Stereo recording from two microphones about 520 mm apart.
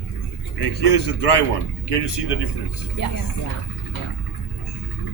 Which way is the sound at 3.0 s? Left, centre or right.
Left.